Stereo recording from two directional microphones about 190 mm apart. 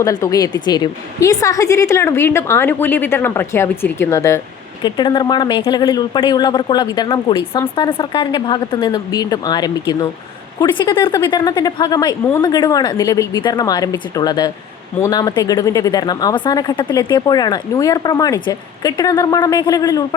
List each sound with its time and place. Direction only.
0.0 s a woman's voice: 15° left (ahead or behind)